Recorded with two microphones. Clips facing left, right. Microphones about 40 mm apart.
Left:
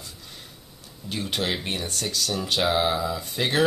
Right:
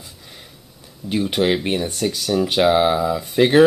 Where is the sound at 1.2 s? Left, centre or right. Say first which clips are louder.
Right 8 dB; centre.